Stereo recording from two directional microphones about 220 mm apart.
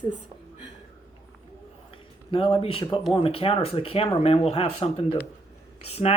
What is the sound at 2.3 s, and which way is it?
Speech, 25° left (ahead or behind).